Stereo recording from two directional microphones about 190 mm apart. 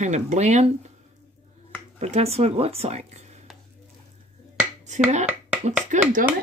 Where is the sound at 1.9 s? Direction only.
35° right (ahead or behind).